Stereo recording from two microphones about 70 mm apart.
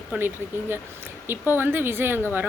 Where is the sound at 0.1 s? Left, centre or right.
Right.